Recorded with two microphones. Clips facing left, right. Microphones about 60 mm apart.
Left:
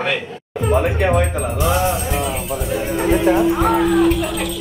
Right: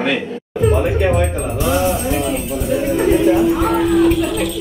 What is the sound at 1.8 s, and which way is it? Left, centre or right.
Speech, centre.